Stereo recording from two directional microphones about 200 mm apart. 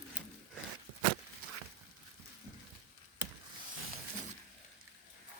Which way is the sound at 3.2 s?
10° right (ahead or behind).